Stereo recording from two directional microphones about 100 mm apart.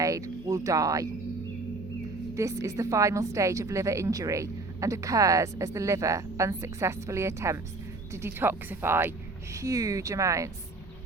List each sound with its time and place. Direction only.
0.0 s speech: 35° right (ahead or behind)
2.3 s speech: 30° right (ahead or behind)